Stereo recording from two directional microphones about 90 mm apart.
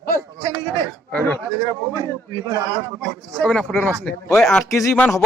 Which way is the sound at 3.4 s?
15° left (ahead or behind).